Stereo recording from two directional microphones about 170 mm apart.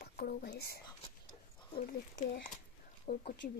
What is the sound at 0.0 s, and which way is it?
Speech, 60° left (ahead or behind).